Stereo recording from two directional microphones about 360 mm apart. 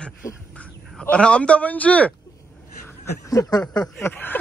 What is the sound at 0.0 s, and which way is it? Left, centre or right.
A man's voice, centre.